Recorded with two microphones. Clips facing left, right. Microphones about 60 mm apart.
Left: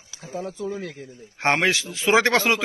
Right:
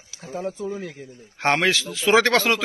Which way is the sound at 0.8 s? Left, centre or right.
Centre.